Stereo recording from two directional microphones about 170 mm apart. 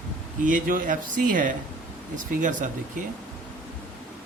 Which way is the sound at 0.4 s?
50° right (ahead or behind).